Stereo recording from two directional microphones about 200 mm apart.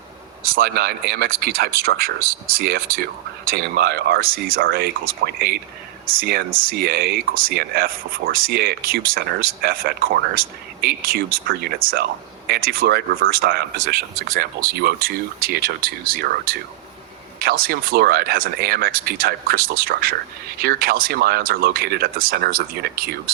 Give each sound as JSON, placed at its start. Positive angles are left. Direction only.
{"t": 0.4, "sound": "speech", "side_deg": -50}